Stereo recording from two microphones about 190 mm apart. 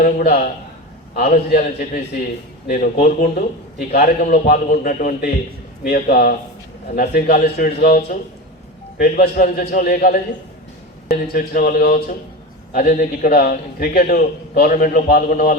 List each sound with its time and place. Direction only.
0.0 s a man's voice: 55° left (ahead or behind)
2.6 s a man's voice: 45° left (ahead or behind)
7.4 s a man's voice: 45° left (ahead or behind)
11.3 s a man's voice: 50° left (ahead or behind)